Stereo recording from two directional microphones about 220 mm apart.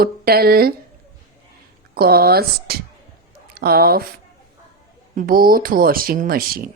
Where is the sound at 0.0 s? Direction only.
45° right (ahead or behind).